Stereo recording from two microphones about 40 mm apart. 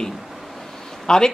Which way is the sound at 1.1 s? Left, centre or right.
Centre.